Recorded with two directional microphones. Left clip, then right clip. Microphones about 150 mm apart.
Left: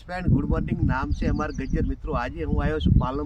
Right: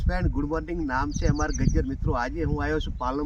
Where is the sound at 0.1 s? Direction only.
20° left (ahead or behind).